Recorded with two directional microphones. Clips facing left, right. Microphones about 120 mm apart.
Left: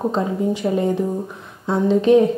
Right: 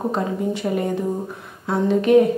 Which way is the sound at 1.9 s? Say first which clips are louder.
Left 2 dB; 25° left (ahead or behind).